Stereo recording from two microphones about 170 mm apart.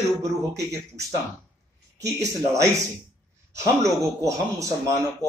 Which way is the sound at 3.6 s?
20° right (ahead or behind).